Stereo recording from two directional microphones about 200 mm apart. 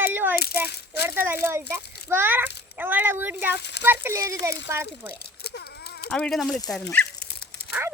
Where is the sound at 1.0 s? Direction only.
10° right (ahead or behind).